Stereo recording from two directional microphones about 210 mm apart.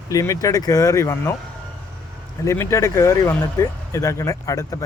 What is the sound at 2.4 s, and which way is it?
Speech, 15° left (ahead or behind).